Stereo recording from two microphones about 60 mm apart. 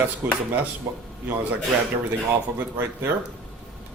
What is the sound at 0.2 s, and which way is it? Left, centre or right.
Speech, right.